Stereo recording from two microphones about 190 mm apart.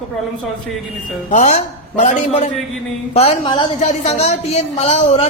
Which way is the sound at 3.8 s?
35° left (ahead or behind).